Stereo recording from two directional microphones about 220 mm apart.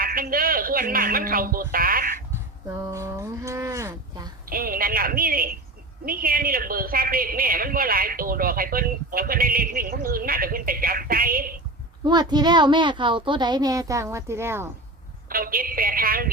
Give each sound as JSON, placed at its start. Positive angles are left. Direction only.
{"t": 0.0, "sound": "speech", "side_deg": -40}
{"t": 2.6, "sound": "speech", "side_deg": -15}
{"t": 4.4, "sound": "a woman's voice", "side_deg": -40}
{"t": 12.0, "sound": "a child's voice", "side_deg": -20}
{"t": 15.3, "sound": "a woman's voice", "side_deg": -40}